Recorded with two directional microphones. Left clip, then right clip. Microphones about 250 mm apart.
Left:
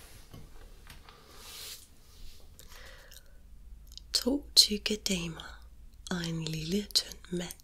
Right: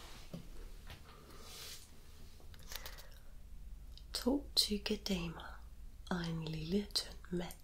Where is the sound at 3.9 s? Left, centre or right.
Left.